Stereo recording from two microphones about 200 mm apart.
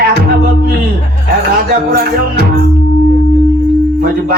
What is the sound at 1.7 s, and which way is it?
Speech, 45° right (ahead or behind).